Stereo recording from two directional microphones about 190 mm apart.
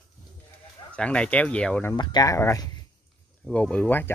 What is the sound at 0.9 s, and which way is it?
Speech, 5° left (ahead or behind).